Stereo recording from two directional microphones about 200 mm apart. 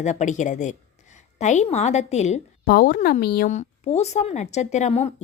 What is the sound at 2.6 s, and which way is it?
Speech, 45° left (ahead or behind).